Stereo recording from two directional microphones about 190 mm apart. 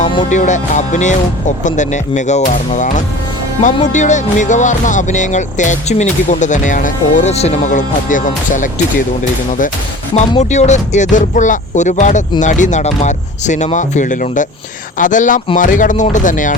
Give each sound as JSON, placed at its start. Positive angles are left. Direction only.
{"t": 0.3, "sound": "music", "side_deg": 40}
{"t": 3.6, "sound": "speech", "side_deg": 25}
{"t": 3.9, "sound": "music", "side_deg": 40}
{"t": 10.2, "sound": "music", "side_deg": 35}
{"t": 14.9, "sound": "speech", "side_deg": 40}